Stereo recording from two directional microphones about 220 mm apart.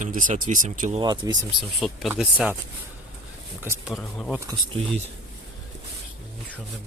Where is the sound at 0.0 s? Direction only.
35° right (ahead or behind).